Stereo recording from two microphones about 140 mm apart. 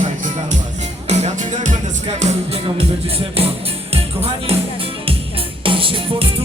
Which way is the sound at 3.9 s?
45° right (ahead or behind).